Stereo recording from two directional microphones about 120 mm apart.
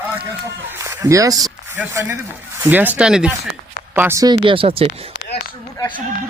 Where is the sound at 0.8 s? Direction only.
25° right (ahead or behind).